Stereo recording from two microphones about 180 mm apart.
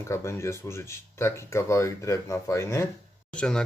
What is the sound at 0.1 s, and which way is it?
Speech, 15° left (ahead or behind).